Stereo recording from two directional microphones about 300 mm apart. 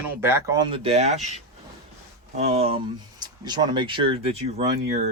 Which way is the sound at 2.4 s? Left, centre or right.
Centre.